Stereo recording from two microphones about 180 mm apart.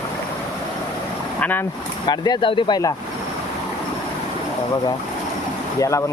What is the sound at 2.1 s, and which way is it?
Speech, 25° left (ahead or behind).